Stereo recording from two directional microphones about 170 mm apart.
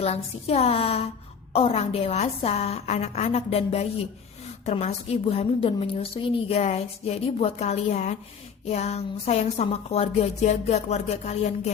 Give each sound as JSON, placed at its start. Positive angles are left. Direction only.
{"t": 0.0, "sound": "a woman's voice", "side_deg": 35}